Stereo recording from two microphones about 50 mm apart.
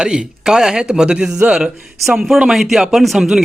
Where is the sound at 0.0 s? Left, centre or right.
Centre.